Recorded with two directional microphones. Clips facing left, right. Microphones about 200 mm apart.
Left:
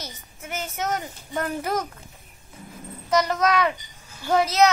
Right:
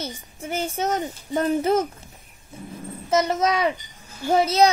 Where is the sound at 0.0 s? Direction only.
30° right (ahead or behind).